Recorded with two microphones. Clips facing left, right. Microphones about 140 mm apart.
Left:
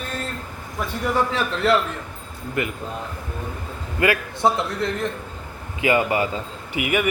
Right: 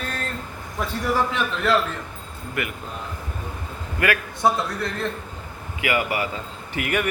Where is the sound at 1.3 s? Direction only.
25° left (ahead or behind).